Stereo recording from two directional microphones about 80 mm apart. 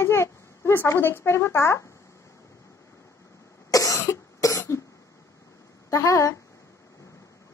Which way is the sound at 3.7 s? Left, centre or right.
Left.